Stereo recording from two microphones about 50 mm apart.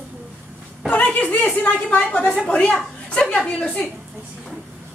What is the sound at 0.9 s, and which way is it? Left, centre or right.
A woman's voice, left.